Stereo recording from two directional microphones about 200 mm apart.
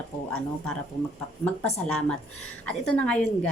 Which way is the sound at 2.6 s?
5° left (ahead or behind).